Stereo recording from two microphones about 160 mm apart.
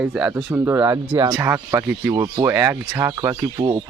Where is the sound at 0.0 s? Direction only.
10° right (ahead or behind).